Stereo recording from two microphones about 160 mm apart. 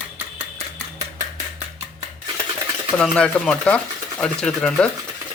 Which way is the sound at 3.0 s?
5° left (ahead or behind).